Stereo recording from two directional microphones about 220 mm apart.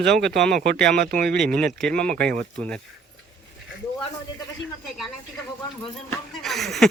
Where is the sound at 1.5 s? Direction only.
5° left (ahead or behind).